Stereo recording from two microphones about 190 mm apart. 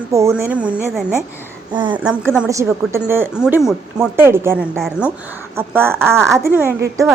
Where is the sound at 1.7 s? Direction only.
25° right (ahead or behind).